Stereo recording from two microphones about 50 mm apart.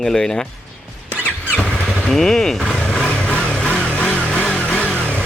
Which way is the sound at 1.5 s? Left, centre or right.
Centre.